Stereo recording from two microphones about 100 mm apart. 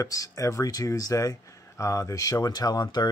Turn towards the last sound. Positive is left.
turn(degrees=45)  # may be behind; listen again after turning